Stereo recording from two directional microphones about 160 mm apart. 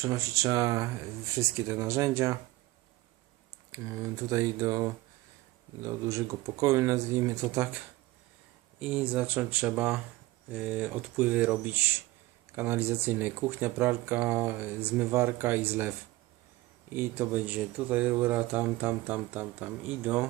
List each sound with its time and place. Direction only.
0.0 s speech: 20° right (ahead or behind)
3.7 s speech: 20° right (ahead or behind)
5.8 s speech: 20° right (ahead or behind)
8.8 s speech: 10° right (ahead or behind)